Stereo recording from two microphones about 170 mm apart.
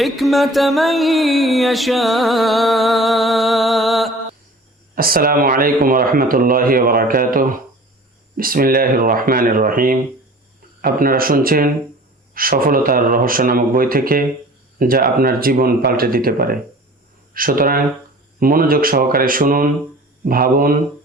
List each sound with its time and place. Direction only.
0.0 s music: centre (ahead or behind)
4.9 s speech: 60° right (ahead or behind)